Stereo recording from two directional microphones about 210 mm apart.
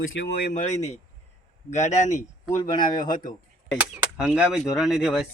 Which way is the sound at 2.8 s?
40° left (ahead or behind).